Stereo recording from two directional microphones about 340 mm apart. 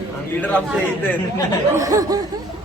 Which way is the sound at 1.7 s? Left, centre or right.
Centre.